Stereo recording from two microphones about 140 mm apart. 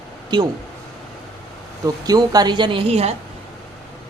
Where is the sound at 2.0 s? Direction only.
30° right (ahead or behind); by 3.2 s 45° right (ahead or behind).